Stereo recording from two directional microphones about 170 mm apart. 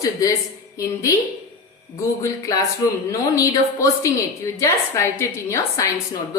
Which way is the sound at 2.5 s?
20° left (ahead or behind).